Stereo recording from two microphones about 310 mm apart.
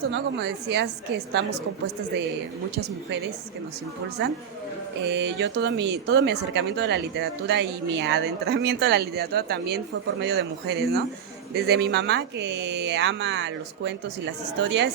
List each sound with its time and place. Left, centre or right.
0.0 s speech: right
5.0 s speech: right